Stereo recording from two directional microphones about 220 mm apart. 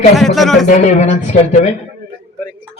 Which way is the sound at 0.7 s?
35° left (ahead or behind).